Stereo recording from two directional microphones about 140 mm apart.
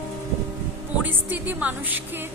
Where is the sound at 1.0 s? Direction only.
10° right (ahead or behind).